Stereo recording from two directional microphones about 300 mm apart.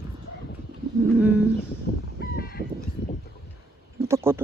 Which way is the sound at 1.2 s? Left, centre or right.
Centre.